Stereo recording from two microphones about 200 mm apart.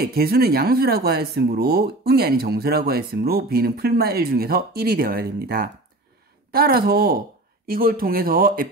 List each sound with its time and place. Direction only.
0.0 s speech: 50° right (ahead or behind)